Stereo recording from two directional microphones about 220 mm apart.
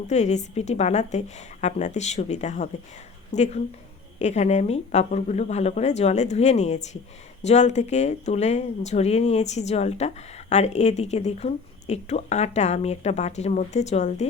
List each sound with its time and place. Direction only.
0.1 s speech: 30° left (ahead or behind)